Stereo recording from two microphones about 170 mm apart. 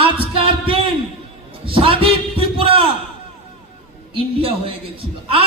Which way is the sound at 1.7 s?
30° right (ahead or behind).